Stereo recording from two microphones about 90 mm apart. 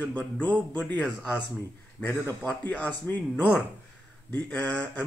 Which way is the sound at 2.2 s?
15° left (ahead or behind).